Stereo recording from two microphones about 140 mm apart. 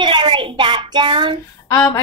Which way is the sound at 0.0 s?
35° right (ahead or behind).